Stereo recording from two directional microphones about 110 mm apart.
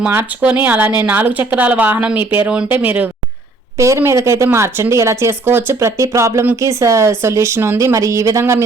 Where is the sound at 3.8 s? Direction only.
25° right (ahead or behind).